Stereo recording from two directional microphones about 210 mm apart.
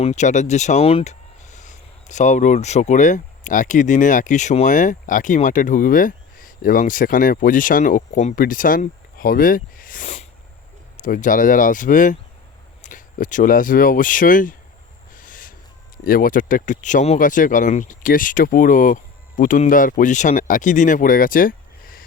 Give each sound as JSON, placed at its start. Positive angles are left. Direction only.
{"t": 0.0, "sound": "speech", "side_deg": 35}
{"t": 15.1, "sound": "owl", "side_deg": 40}
{"t": 16.0, "sound": "speech", "side_deg": 40}